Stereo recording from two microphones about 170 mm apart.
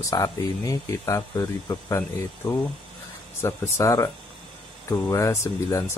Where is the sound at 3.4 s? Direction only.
20° left (ahead or behind).